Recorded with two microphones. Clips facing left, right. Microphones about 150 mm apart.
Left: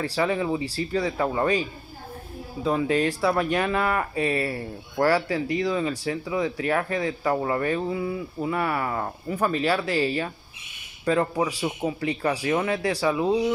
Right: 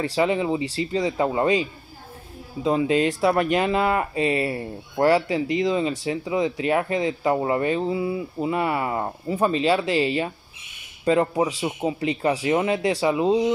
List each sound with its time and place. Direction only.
0.3 s speech: 10° right (ahead or behind)
0.6 s speech: 90° right
0.9 s speech: 15° right (ahead or behind)
3.1 s speech: centre (ahead or behind)
3.5 s speech: 25° right (ahead or behind)